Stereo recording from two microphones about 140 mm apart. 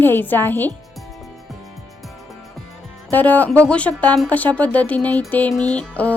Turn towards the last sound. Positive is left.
turn(degrees=10)  # may be behind; listen again after turning